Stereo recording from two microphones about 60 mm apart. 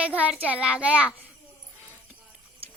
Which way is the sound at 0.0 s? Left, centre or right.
Right.